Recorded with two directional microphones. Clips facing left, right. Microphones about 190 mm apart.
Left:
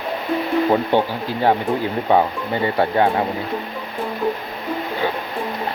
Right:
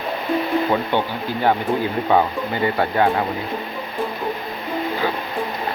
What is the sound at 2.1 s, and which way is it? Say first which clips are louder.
Speech: left 2 dB; 30° left (ahead or behind).